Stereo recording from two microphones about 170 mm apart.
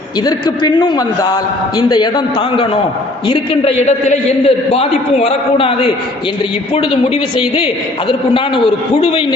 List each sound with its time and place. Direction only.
0.3 s a man's voice: 25° left (ahead or behind)
3.8 s a woman's voice: 40° left (ahead or behind)